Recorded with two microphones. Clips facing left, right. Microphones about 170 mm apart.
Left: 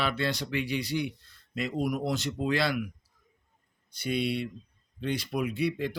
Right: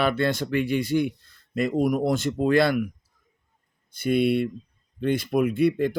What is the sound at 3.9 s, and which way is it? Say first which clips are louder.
Speech: right 8 dB; 50° right (ahead or behind).